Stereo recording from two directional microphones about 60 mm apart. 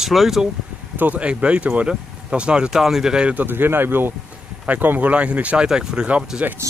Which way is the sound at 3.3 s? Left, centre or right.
Right.